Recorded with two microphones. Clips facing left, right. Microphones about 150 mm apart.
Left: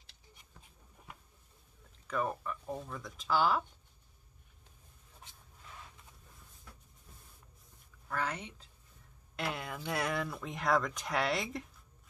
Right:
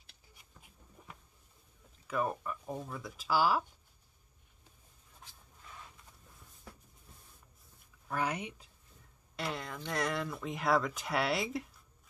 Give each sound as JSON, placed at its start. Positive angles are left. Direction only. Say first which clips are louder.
{"t": 2.0, "sound": "speech", "louder": "right 1 dB", "side_deg": -10}
{"t": 8.1, "sound": "speech", "louder": "right 2 dB", "side_deg": -15}
{"t": 9.4, "sound": "speech", "louder": "left 1 dB", "side_deg": 5}